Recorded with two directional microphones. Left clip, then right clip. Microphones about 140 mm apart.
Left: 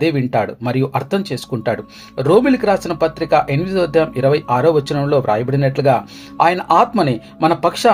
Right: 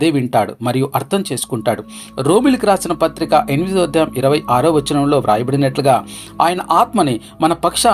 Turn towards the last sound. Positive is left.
turn(degrees=-40)  # may be behind; listen again after turning